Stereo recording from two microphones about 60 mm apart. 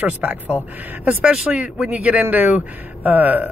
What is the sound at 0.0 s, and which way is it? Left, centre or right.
Speech, right.